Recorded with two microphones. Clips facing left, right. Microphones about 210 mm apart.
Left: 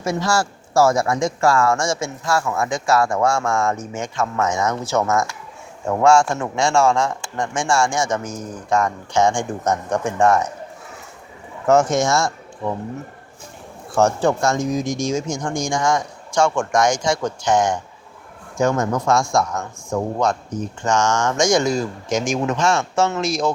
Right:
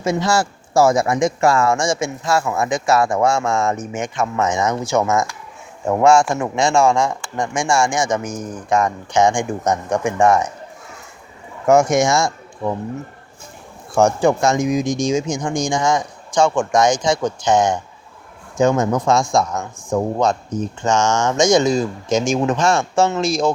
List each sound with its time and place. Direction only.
0.0 s speech: 20° right (ahead or behind)
11.6 s speech: 10° right (ahead or behind)
13.9 s speech: 15° right (ahead or behind); by 23.5 s 30° right (ahead or behind)